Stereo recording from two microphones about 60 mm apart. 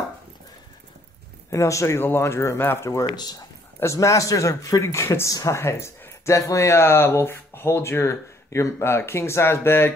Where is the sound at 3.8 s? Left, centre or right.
Left.